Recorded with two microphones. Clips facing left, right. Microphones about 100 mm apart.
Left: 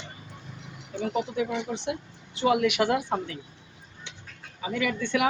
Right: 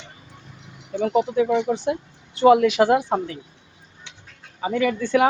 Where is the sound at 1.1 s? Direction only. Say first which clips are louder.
Right 9 dB; 35° right (ahead or behind).